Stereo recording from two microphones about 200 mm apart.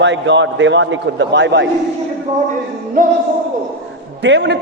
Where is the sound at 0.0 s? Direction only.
65° right (ahead or behind).